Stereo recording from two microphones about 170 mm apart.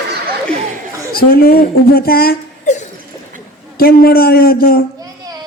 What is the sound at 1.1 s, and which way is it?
A woman's voice, 60° left (ahead or behind).